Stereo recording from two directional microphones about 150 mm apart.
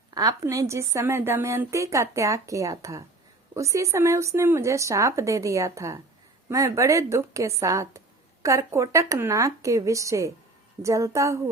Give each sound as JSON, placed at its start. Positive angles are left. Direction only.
{"t": 0.1, "sound": "speech", "side_deg": -25}